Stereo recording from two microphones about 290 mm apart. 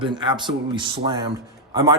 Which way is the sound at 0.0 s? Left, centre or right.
Centre.